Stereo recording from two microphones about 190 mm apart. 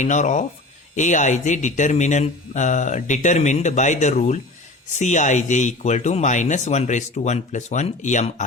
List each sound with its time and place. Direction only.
0.0 s speech: 40° left (ahead or behind)